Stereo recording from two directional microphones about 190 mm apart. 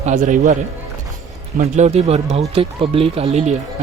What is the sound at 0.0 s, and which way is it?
Speech, 40° right (ahead or behind).